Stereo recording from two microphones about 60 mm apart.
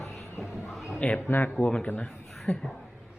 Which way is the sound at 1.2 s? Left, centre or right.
Left.